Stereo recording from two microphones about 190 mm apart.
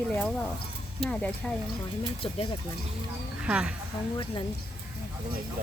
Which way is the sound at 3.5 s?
5° right (ahead or behind).